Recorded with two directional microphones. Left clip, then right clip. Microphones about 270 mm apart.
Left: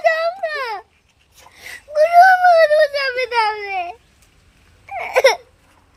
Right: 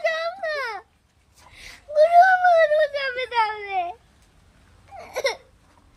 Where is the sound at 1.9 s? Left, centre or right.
Left.